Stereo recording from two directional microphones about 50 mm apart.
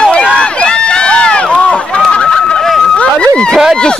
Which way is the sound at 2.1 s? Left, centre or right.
Centre.